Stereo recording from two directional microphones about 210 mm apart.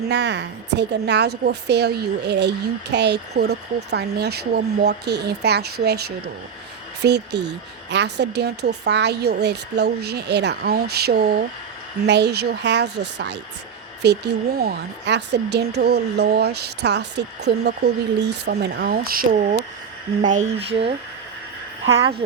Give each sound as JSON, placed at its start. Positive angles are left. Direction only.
{"t": 0.1, "sound": "a woman's voice", "side_deg": -55}
{"t": 7.0, "sound": "a woman's voice", "side_deg": -55}
{"t": 20.3, "sound": "speech", "side_deg": -25}